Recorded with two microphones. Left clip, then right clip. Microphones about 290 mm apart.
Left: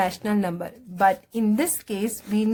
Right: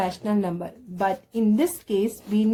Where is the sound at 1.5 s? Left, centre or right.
Left.